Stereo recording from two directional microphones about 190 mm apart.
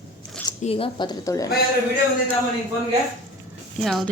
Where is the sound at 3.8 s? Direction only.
Centre (ahead or behind).